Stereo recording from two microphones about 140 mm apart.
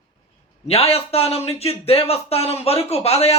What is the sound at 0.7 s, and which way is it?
Speech, 45° left (ahead or behind).